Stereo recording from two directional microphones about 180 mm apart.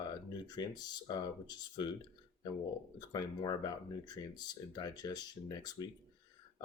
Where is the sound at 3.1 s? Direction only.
20° left (ahead or behind).